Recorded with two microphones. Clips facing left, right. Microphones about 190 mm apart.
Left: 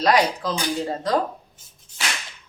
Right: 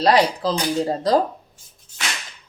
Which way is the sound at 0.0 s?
35° right (ahead or behind).